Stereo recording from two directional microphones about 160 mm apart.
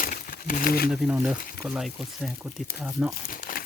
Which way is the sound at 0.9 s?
5° right (ahead or behind).